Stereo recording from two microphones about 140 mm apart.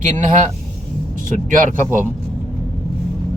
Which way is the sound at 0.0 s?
60° right (ahead or behind).